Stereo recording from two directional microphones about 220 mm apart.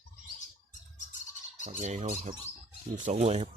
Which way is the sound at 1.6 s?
35° right (ahead or behind).